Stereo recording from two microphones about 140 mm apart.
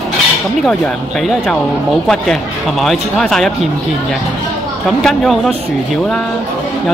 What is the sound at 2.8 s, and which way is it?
Speech, centre (ahead or behind).